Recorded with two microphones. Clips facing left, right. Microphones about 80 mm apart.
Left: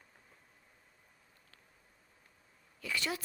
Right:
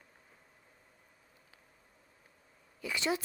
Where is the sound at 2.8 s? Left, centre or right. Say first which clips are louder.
Right 4 dB; right.